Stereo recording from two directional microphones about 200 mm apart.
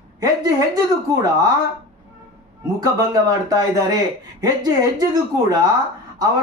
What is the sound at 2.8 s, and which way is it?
Speech, 20° right (ahead or behind).